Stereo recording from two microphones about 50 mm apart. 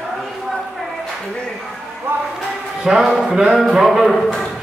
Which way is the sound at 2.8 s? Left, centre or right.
Centre.